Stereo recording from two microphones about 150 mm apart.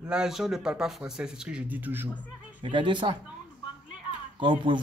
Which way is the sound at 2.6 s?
35° right (ahead or behind).